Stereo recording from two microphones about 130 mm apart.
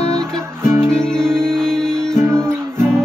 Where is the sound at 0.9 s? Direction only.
5° left (ahead or behind).